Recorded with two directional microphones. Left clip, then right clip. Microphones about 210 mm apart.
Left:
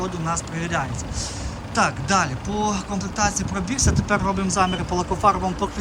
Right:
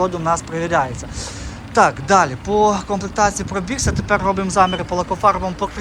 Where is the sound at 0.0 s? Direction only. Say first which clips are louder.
Right 8 dB; 5° left (ahead or behind).